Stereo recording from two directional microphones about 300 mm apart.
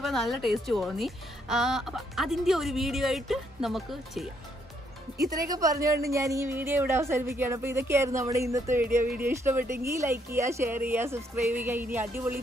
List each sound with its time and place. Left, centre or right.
0.0 s a woman's voice: centre
5.5 s speech: centre
9.0 s speech: right
9.3 s speech: centre